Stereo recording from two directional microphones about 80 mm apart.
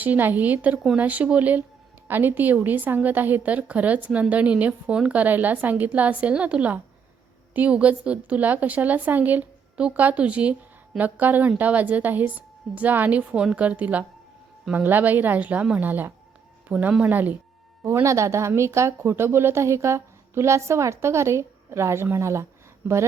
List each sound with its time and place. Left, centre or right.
0.0 s a woman's voice: right
18.0 s a woman's voice: right